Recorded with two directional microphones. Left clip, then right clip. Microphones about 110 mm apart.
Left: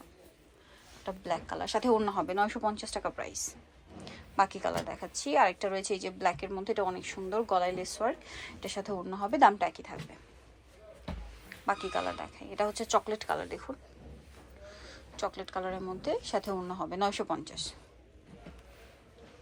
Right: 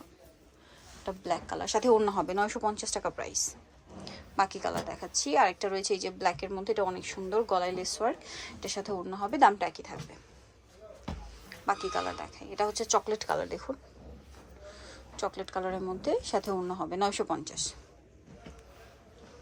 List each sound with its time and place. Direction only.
1.0 s a woman's voice: 35° right (ahead or behind)
11.4 s music: 25° right (ahead or behind)
12.3 s a woman's voice: 25° right (ahead or behind)
14.7 s a woman's voice: 40° right (ahead or behind)